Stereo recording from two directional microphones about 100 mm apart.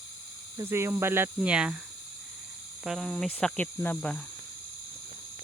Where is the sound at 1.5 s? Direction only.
10° right (ahead or behind).